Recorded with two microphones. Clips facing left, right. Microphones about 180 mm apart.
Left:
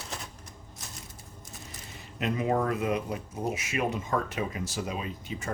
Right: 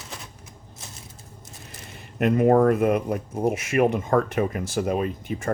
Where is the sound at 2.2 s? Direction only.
55° right (ahead or behind).